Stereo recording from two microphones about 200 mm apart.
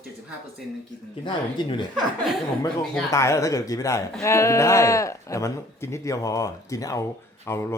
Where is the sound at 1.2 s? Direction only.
25° left (ahead or behind).